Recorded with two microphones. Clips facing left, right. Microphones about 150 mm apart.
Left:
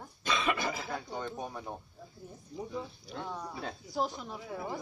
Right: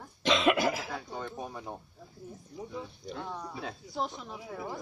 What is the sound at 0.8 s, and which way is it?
Speech, centre (ahead or behind).